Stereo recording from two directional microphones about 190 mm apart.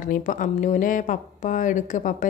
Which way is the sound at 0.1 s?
45° left (ahead or behind).